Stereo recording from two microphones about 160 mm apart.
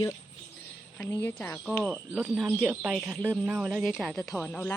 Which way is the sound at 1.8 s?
Centre (ahead or behind).